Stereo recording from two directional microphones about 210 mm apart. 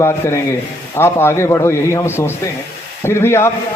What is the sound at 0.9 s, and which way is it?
Speech, 10° left (ahead or behind).